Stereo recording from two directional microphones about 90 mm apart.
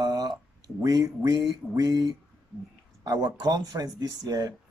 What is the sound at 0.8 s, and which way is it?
Speech, 40° right (ahead or behind).